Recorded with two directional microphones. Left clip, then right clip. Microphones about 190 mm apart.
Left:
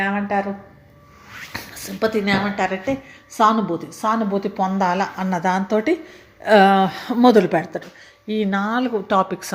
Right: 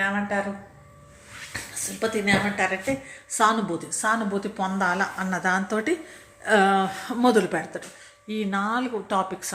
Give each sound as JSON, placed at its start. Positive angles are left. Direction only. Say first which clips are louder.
{"t": 0.0, "sound": "a sound", "louder": "left 4 dB", "side_deg": 30}
{"t": 1.5, "sound": "a woman's voice", "louder": "left 3 dB", "side_deg": 40}
{"t": 6.4, "sound": "a woman's voice", "louder": "left 7 dB", "side_deg": 35}